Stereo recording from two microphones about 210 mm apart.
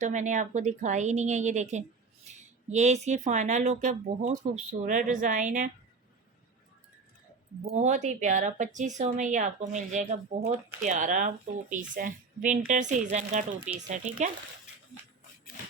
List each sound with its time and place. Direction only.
0.0 s speech: 35° right (ahead or behind)
7.6 s speech: 35° right (ahead or behind)